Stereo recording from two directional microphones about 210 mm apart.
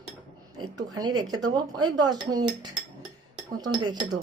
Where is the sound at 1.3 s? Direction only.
20° right (ahead or behind).